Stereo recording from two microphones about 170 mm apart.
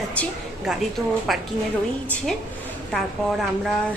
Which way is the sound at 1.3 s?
Centre (ahead or behind).